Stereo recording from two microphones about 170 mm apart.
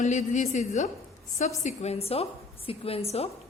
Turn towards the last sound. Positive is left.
turn(degrees=35)  # may be behind; listen again after turning